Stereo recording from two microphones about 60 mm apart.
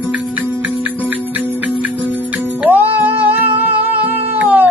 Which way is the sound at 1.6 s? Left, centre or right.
Right.